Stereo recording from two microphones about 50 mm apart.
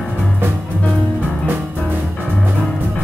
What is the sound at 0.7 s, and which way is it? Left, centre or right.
Music, left.